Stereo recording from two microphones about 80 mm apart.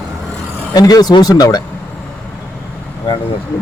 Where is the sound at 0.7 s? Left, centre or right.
Left.